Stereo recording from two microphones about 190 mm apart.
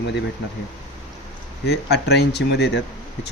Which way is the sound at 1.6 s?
60° left (ahead or behind).